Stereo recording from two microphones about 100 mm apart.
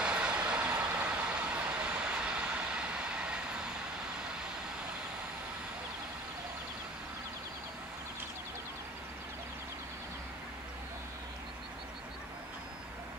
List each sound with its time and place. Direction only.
0.0 s vehicle: 10° right (ahead or behind)